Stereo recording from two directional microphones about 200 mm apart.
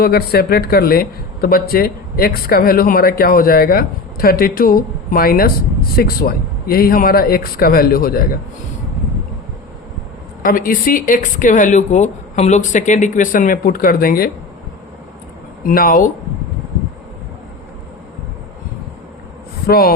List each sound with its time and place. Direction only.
0.0 s speech: 50° left (ahead or behind)
10.4 s speech: 45° left (ahead or behind)
15.6 s speech: 45° left (ahead or behind)
19.6 s speech: 50° left (ahead or behind)